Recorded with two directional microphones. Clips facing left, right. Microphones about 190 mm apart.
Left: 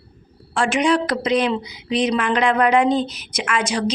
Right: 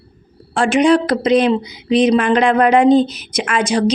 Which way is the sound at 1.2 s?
25° right (ahead or behind).